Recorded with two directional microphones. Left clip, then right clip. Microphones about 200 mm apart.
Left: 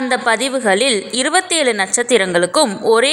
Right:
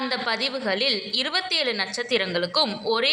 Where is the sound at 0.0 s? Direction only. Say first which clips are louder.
Left 9 dB; 45° left (ahead or behind).